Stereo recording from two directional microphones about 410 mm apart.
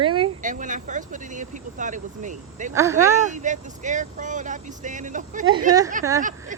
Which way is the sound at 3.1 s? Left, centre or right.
Centre.